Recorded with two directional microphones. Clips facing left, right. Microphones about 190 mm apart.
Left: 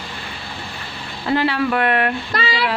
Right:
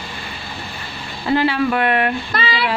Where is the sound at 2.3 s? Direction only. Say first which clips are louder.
Even; 40° left (ahead or behind).